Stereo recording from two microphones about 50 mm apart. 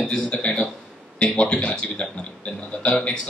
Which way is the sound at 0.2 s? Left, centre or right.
Left.